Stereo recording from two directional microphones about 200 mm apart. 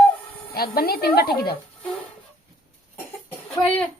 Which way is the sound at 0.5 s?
50° left (ahead or behind).